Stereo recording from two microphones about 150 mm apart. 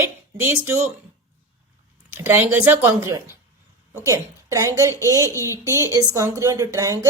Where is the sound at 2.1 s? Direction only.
15° right (ahead or behind).